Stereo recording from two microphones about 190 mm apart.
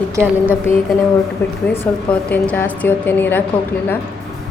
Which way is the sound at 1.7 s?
10° left (ahead or behind).